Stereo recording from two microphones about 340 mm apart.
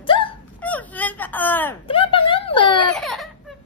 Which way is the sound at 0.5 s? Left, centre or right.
Centre.